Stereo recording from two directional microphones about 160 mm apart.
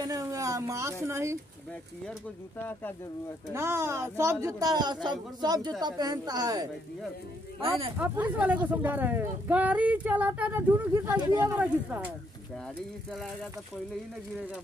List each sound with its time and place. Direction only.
0.0 s a sound: 20° right (ahead or behind)
1.0 s speech: 15° right (ahead or behind)
3.5 s speech: 15° right (ahead or behind)
8.0 s speech: 10° right (ahead or behind)